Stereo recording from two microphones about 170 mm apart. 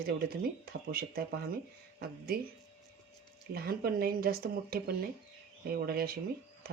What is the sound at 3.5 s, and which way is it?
Speech, 65° right (ahead or behind).